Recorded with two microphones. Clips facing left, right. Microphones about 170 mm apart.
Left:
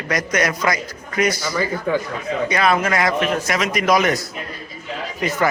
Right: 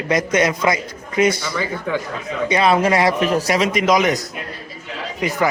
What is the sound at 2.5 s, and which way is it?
A man's voice, 30° right (ahead or behind).